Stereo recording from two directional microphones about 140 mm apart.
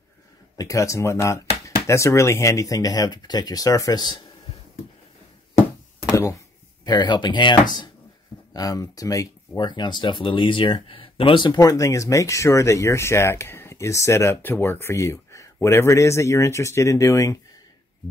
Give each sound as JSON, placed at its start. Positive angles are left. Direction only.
{"t": 0.6, "sound": "speech", "side_deg": 25}
{"t": 6.0, "sound": "a sound", "side_deg": 20}
{"t": 6.8, "sound": "speech", "side_deg": 30}